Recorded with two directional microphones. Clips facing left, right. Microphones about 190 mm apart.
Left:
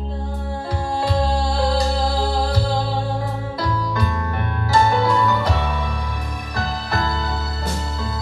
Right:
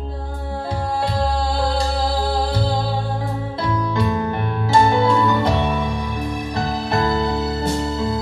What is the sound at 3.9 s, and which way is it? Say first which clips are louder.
Music: right 4 dB; 25° right (ahead or behind).